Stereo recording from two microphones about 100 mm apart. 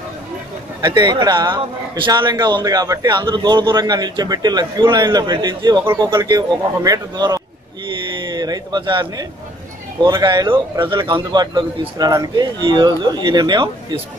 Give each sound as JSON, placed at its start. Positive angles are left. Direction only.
{"t": 0.7, "sound": "a man's voice", "side_deg": -35}
{"t": 2.4, "sound": "a man's voice", "side_deg": -40}
{"t": 12.0, "sound": "a man's voice", "side_deg": -40}